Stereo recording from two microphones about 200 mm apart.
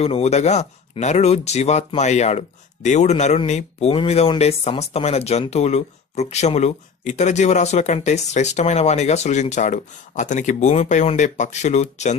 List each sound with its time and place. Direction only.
0.0 s speech: 30° left (ahead or behind)